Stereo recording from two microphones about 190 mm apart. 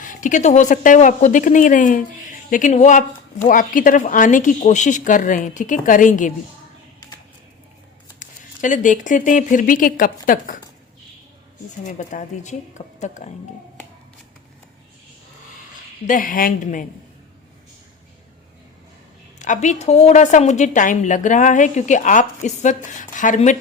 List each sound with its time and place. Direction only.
0.0 s a woman's voice: 45° left (ahead or behind)
8.2 s speech: 40° left (ahead or behind)
11.9 s a woman's voice: 40° left (ahead or behind)
16.0 s speech: 45° left (ahead or behind)
19.4 s a woman's voice: 40° left (ahead or behind)